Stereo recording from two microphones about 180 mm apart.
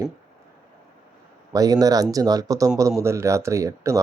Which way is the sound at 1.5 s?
20° right (ahead or behind).